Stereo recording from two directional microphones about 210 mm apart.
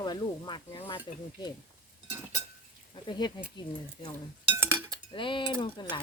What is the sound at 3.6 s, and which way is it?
Cutlery, 20° left (ahead or behind).